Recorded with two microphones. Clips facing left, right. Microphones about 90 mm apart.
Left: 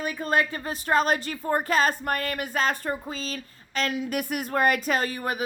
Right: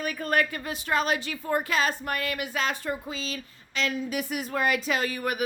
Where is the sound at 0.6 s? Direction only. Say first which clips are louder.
Left 4 dB; 40° left (ahead or behind).